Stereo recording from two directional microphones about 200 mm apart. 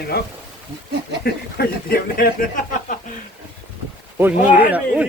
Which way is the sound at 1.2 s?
50° left (ahead or behind).